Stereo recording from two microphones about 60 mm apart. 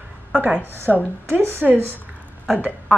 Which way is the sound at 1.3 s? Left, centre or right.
Right.